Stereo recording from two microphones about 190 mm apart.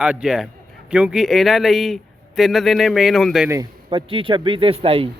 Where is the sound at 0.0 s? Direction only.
5° right (ahead or behind).